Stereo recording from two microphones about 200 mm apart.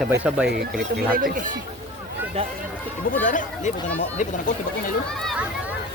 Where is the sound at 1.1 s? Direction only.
45° right (ahead or behind).